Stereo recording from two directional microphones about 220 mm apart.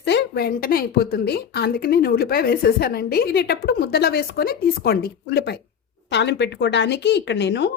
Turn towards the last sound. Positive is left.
turn(degrees=50)  # may be behind; listen again after turning